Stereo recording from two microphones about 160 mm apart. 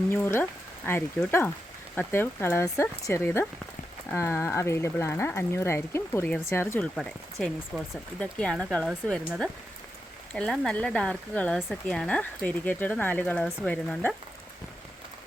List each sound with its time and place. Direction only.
0.1 s speech: 15° left (ahead or behind)